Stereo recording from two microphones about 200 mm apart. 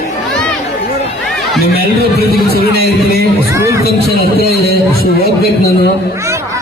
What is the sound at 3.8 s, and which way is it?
A man's voice, 50° left (ahead or behind).